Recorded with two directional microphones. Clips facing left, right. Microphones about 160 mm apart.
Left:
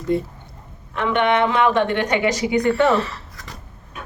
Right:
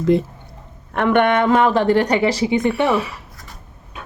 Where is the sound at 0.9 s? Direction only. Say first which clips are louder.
Right 3 dB; 55° right (ahead or behind); by 3.2 s 10° right (ahead or behind).